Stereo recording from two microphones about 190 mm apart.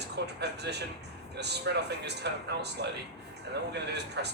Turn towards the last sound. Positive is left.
turn(degrees=-60)  # may be behind; listen again after turning